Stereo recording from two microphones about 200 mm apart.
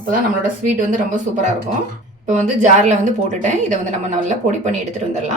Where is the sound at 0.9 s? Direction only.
40° right (ahead or behind).